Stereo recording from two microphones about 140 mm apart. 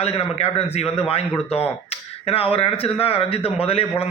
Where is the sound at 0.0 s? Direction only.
50° left (ahead or behind).